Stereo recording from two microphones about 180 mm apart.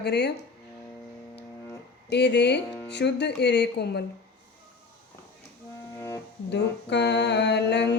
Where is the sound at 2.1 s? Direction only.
70° left (ahead or behind).